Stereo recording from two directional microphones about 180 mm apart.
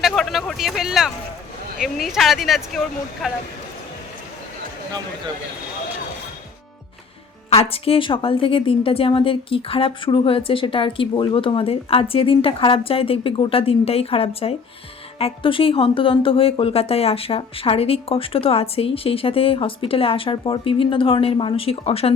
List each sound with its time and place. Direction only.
0.0 s a sound: centre (ahead or behind)
1.8 s speech: centre (ahead or behind)
4.9 s speech: 20° right (ahead or behind)
7.5 s a woman's voice: 30° left (ahead or behind)